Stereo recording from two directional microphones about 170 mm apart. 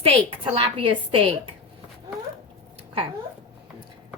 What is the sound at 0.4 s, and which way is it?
A woman's voice, 35° right (ahead or behind).